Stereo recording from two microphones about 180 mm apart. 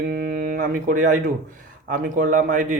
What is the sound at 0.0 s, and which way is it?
A man's voice, 50° right (ahead or behind).